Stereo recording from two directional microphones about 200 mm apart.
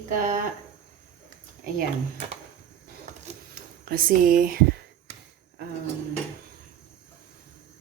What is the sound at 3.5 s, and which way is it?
Speech, 45° right (ahead or behind).